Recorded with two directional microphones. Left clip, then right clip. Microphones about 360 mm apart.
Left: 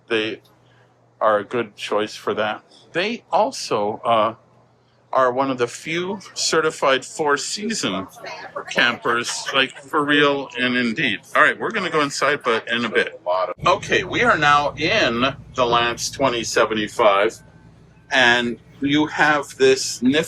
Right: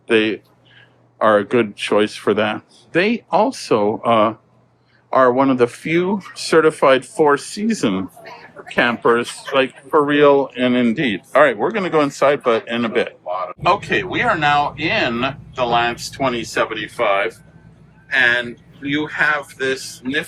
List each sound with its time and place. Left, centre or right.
0.1 s speech: right; by 20.2 s centre